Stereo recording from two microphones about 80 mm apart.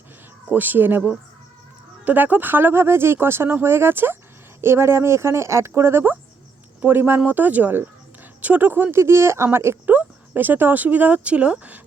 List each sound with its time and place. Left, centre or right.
0.5 s speech: right
2.0 s speech: right